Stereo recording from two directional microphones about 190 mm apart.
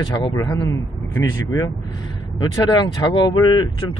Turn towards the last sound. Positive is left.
turn(degrees=20)  # may be behind; listen again after turning